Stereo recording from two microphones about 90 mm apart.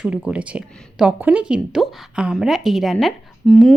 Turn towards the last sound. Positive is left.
turn(degrees=0)  # may be behind; listen again after turning